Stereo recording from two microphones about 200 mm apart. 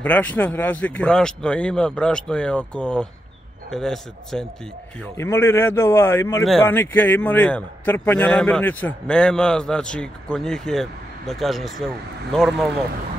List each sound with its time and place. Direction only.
0.0 s a man's voice: 10° left (ahead or behind)